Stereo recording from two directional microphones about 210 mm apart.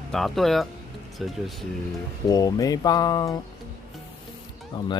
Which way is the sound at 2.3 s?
15° left (ahead or behind).